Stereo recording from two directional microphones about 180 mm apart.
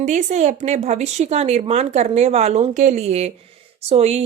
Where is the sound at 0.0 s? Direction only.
40° right (ahead or behind).